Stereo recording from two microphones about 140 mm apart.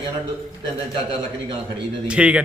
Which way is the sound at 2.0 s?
10° right (ahead or behind).